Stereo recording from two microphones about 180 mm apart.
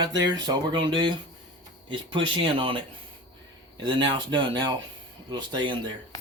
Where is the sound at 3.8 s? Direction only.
25° right (ahead or behind).